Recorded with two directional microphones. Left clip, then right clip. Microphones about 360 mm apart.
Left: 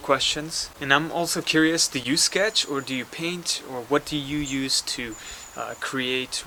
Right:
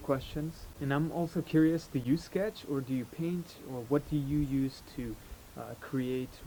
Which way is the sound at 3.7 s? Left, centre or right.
Centre.